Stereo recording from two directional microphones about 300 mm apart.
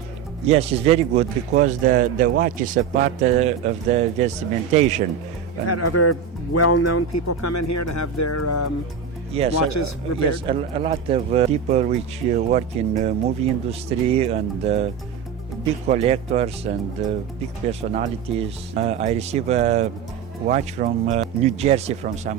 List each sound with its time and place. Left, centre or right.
0.4 s speech: centre
5.6 s speech: left
9.3 s speech: centre
9.6 s speech: left
10.4 s speech: centre
15.9 s speech: centre